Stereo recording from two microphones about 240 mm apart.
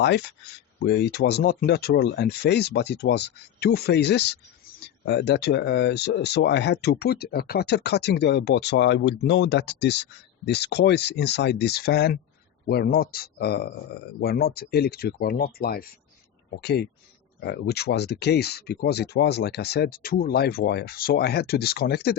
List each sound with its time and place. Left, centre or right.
0.0 s speech: left